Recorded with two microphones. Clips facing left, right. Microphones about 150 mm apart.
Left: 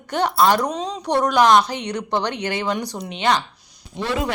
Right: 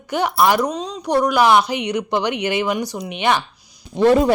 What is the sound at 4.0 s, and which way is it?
Speech, 45° right (ahead or behind).